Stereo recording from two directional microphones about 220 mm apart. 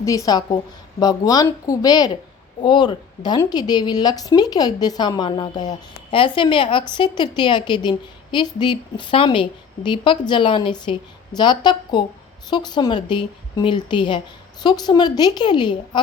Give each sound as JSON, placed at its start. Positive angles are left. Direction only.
{"t": 0.0, "sound": "a woman's voice", "side_deg": 15}